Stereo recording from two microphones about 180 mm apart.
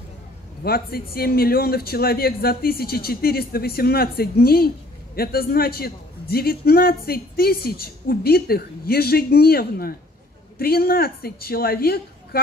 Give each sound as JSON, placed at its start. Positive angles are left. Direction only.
{"t": 0.7, "sound": "a man's voice", "side_deg": 55}